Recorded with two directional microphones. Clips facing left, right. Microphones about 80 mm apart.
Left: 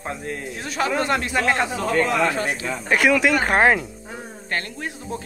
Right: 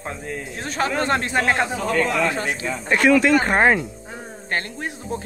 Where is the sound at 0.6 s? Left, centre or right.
Right.